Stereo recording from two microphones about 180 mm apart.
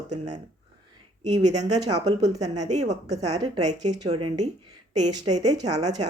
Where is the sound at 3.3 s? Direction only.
20° right (ahead or behind).